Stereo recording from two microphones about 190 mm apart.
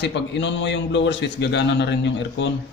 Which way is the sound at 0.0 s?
65° left (ahead or behind).